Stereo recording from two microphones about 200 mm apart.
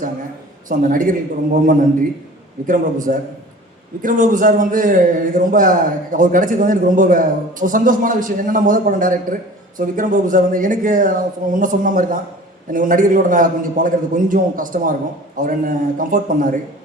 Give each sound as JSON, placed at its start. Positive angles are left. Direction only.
{"t": 0.7, "sound": "a man's voice", "side_deg": -40}
{"t": 2.6, "sound": "a man's voice", "side_deg": -40}